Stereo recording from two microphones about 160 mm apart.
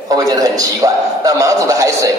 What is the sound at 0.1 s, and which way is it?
A man's voice, 20° right (ahead or behind).